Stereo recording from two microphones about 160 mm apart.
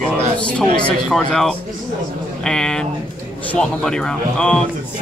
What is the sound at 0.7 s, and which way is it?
Speech, 5° left (ahead or behind).